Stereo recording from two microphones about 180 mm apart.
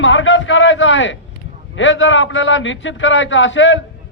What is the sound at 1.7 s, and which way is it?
A man's voice, 90° left.